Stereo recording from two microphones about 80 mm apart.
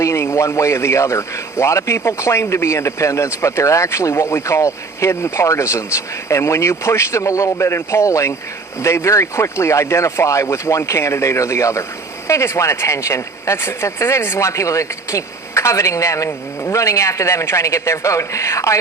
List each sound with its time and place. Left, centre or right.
0.0 s speech: left